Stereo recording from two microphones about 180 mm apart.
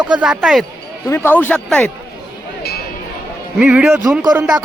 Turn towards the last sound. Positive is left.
turn(degrees=-5)  # may be behind; listen again after turning